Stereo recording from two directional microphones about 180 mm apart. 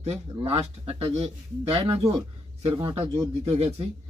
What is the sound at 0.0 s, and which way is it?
Speech, 35° right (ahead or behind).